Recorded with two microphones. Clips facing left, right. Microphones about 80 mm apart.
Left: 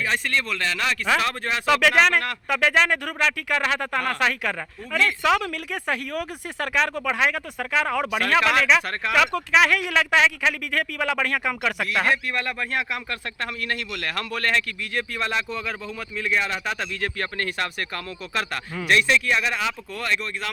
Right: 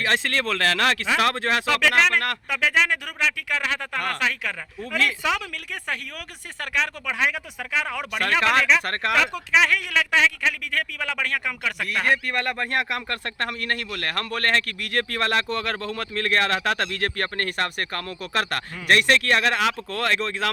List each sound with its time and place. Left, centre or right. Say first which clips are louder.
0.0 s speech: right 1 dB; right
1.6 s speech: left 4 dB; centre
8.8 s speech: right 2 dB; right
9.5 s speech: left 2 dB; centre
12.3 s speech: right 2 dB; right
14.8 s speech: right 2 dB; right